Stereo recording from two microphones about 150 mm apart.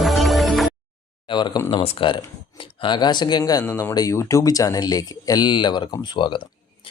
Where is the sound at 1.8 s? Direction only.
40° left (ahead or behind).